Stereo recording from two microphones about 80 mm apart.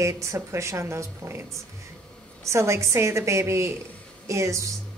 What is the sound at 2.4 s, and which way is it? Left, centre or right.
A woman's voice, right.